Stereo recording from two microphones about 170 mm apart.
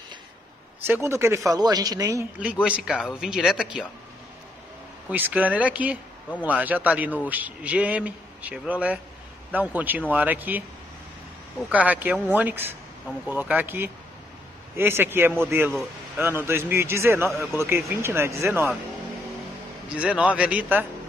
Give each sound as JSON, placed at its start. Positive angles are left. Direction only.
{"t": 0.8, "sound": "a man's voice", "side_deg": -15}
{"t": 2.3, "sound": "speech", "side_deg": -5}
{"t": 5.1, "sound": "a man's voice", "side_deg": -10}
{"t": 20.0, "sound": "a man's voice", "side_deg": -5}